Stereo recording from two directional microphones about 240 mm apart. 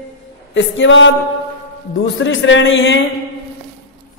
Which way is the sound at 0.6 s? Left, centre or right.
Left.